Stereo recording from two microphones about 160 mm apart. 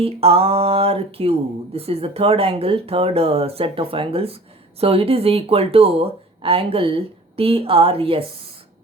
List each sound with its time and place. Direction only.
0.0 s speech: 35° right (ahead or behind)